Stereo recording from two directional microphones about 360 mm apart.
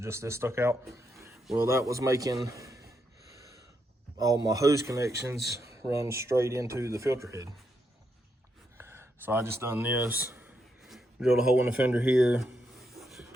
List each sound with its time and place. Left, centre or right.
0.0 s speech: centre
4.2 s speech: centre
8.8 s a sound: centre